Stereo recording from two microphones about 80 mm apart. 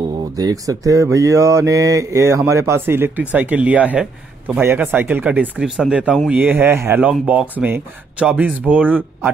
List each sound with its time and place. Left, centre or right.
0.4 s speech: right
3.3 s speech: centre
7.0 s speech: centre